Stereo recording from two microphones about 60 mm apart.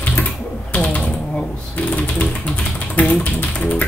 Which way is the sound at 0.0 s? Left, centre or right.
Left.